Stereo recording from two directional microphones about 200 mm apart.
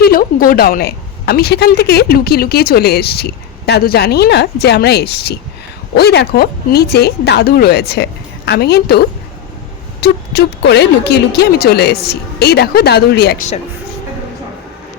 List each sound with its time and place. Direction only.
0.0 s a woman's voice: 45° left (ahead or behind)